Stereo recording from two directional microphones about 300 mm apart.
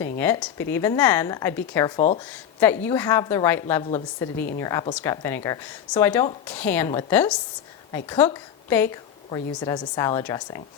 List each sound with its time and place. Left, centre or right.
0.0 s speech: centre
4.4 s a woman's voice: left
4.6 s a woman's voice: centre